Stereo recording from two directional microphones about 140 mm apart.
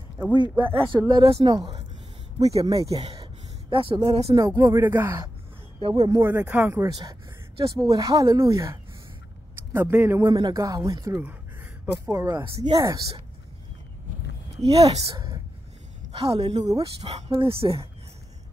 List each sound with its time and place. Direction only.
0.2 s a woman's voice: 30° right (ahead or behind)
3.7 s speech: 40° right (ahead or behind)
4.4 s speech: 20° right (ahead or behind)
5.9 s a woman's voice: 30° right (ahead or behind)
6.2 s a woman's voice: 15° right (ahead or behind)
14.6 s a woman's voice: 45° right (ahead or behind)
15.0 s a sound: 25° right (ahead or behind)
16.1 s a woman's voice: 45° right (ahead or behind)